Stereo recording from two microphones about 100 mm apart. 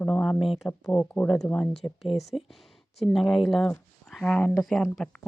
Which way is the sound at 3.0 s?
Centre (ahead or behind).